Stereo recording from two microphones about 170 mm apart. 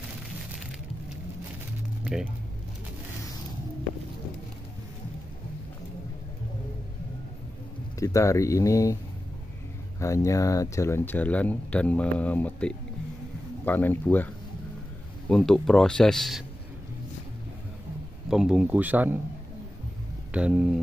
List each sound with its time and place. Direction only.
8.0 s speech: 20° left (ahead or behind)
9.9 s speech: 20° left (ahead or behind); by 16.4 s centre (ahead or behind)
18.3 s speech: 5° right (ahead or behind)
20.3 s speech: 5° right (ahead or behind)